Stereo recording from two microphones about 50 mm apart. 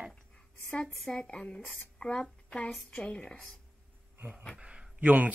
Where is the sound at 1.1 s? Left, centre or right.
Left.